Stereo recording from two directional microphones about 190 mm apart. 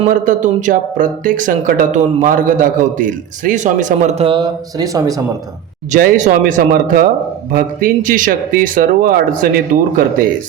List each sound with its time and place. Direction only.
0.1 s speech: 40° right (ahead or behind); by 5.2 s 20° right (ahead or behind)
5.9 s speech: 45° right (ahead or behind)